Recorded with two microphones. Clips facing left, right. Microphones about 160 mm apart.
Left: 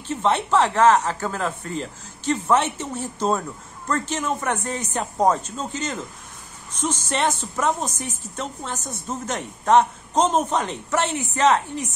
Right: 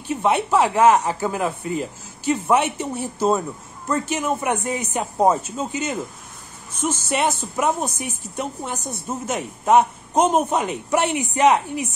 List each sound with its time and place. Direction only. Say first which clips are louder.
0.1 s speech: right 1 dB; 10° right (ahead or behind)